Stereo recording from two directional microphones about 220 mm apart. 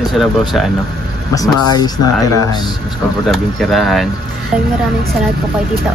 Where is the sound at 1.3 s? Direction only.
15° left (ahead or behind).